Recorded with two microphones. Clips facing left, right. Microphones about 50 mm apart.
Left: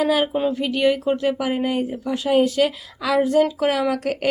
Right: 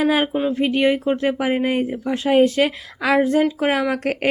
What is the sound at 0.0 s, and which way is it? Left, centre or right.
Speech, right.